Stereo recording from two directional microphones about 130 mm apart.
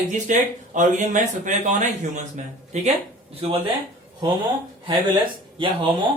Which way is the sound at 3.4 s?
45° right (ahead or behind).